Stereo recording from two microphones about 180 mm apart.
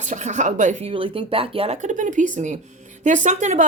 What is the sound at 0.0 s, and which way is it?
Speech, 40° right (ahead or behind).